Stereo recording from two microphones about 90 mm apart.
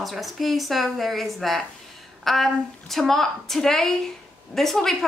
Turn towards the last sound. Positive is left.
turn(degrees=5)  # may be behind; listen again after turning